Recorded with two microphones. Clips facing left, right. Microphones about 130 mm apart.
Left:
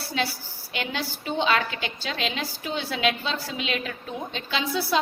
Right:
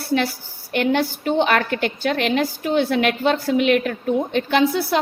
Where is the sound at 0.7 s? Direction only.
55° right (ahead or behind).